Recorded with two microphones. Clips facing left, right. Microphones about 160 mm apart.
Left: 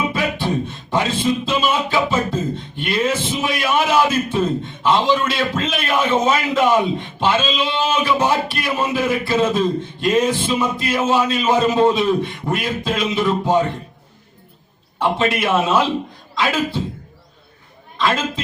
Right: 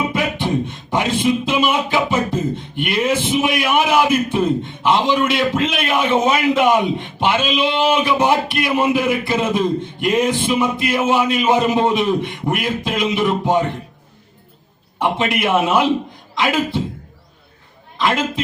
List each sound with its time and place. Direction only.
0.1 s beatboxing: 20° right (ahead or behind)
15.0 s beatboxing: 15° right (ahead or behind)
16.3 s speech: 20° right (ahead or behind)
18.0 s speech: 20° right (ahead or behind)